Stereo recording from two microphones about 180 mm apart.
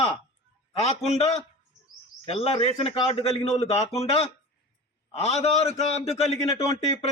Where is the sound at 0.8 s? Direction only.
35° left (ahead or behind).